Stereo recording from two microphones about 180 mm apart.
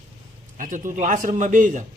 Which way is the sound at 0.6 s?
50° right (ahead or behind).